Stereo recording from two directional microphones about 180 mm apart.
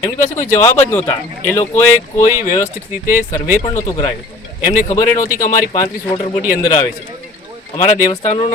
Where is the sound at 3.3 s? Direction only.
15° left (ahead or behind).